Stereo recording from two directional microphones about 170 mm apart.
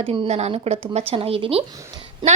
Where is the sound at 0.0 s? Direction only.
35° right (ahead or behind).